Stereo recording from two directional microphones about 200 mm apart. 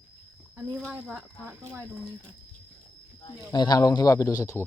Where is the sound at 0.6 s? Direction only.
5° right (ahead or behind).